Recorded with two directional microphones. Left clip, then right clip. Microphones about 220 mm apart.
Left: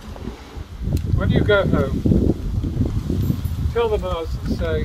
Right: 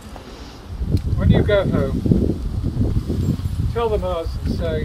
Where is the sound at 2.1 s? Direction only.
5° right (ahead or behind).